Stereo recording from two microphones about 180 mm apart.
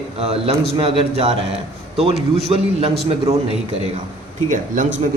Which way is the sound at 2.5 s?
35° right (ahead or behind).